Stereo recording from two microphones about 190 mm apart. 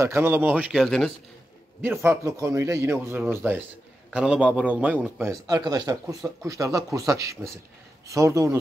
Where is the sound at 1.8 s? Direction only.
10° right (ahead or behind).